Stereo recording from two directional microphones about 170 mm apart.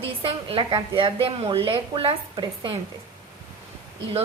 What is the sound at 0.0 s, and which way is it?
A woman's voice, 30° right (ahead or behind).